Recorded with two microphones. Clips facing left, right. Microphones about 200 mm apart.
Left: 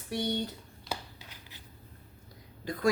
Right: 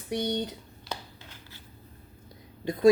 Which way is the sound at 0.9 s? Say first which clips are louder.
Even; 15° left (ahead or behind).